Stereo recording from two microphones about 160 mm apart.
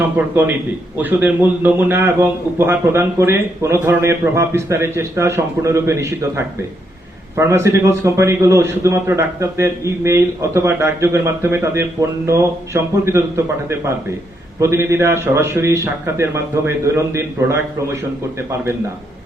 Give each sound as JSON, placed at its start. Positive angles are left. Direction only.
{"t": 0.2, "sound": "a man's voice", "side_deg": -10}